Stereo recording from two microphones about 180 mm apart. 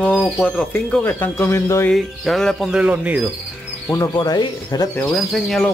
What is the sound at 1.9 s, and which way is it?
Speech, centre (ahead or behind).